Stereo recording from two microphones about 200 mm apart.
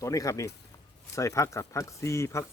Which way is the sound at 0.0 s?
15° left (ahead or behind).